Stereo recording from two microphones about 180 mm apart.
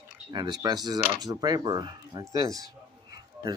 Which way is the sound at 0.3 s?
25° right (ahead or behind).